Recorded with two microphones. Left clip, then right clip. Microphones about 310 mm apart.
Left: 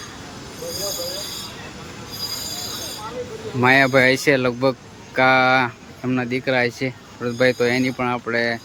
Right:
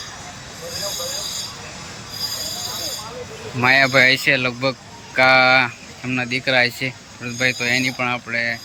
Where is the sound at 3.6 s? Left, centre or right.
Centre.